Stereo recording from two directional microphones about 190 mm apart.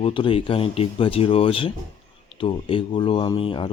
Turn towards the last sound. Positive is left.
turn(degrees=25)  # may be behind; listen again after turning